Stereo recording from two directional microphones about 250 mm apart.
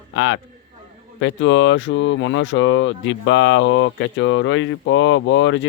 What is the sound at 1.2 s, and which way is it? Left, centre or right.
Speech, left.